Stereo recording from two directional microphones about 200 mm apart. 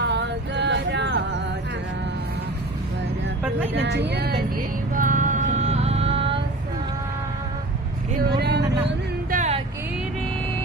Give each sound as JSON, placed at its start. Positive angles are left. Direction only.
{"t": 0.0, "sound": "a sound", "side_deg": -60}
{"t": 3.8, "sound": "speech", "side_deg": -60}
{"t": 4.9, "sound": "music", "side_deg": -40}
{"t": 8.1, "sound": "vehicle", "side_deg": -50}
{"t": 9.3, "sound": "music", "side_deg": -35}